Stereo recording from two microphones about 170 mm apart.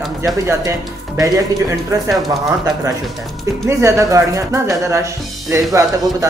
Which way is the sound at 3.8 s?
20° right (ahead or behind).